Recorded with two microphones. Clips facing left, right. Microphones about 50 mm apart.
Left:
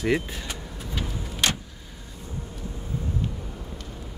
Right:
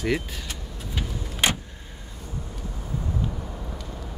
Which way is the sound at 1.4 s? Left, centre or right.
Centre.